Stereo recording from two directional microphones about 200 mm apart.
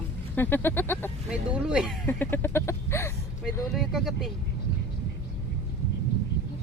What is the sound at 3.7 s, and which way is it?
Speech, centre (ahead or behind).